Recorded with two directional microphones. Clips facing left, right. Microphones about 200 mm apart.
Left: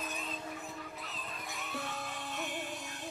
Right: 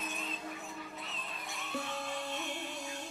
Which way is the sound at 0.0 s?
Centre (ahead or behind).